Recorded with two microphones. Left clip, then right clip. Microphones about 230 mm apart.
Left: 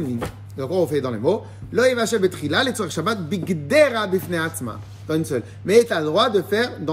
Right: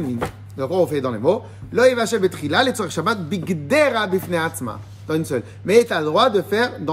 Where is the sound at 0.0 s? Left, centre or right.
Centre.